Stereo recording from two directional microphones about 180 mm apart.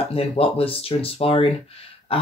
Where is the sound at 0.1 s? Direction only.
30° left (ahead or behind).